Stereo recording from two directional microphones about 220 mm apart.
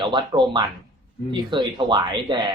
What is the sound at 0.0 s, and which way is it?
Speech, 20° right (ahead or behind).